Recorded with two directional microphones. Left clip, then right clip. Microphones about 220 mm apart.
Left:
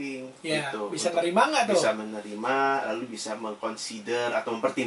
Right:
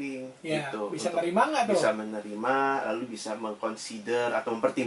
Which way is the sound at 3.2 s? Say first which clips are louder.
Even; 20° right (ahead or behind).